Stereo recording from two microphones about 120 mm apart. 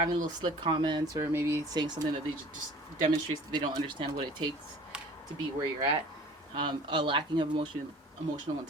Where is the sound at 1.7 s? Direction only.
35° right (ahead or behind).